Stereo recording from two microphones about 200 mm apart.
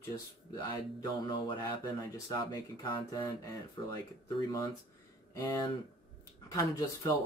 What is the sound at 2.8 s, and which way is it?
Speech, 25° left (ahead or behind).